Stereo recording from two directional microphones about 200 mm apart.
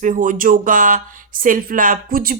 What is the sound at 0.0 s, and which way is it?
A woman's voice, 40° right (ahead or behind).